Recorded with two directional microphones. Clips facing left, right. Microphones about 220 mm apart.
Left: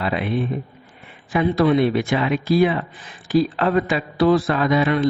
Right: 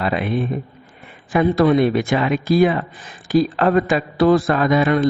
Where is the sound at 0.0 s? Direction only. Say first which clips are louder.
Right 2 dB; 45° right (ahead or behind).